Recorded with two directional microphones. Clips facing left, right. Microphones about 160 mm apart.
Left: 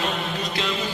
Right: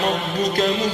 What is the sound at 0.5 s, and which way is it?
Music, 45° right (ahead or behind).